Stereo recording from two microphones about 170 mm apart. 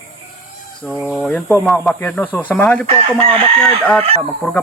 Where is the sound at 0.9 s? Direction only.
10° right (ahead or behind).